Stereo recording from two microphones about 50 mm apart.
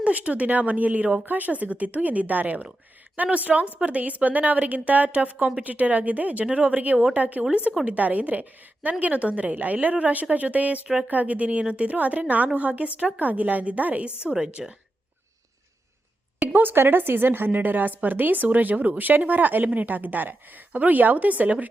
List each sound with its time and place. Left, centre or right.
0.0 s a woman's voice: right
14.6 s speech: centre
16.4 s a woman's voice: right